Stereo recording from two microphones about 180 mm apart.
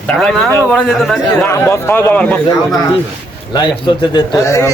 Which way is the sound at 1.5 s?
15° left (ahead or behind).